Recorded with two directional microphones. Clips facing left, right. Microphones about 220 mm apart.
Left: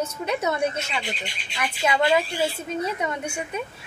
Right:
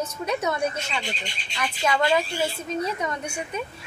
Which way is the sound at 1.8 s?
10° left (ahead or behind).